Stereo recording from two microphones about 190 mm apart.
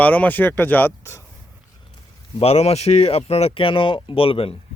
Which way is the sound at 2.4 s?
35° left (ahead or behind).